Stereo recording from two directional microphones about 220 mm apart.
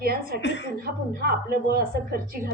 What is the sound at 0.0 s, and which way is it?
A man's voice, 45° right (ahead or behind).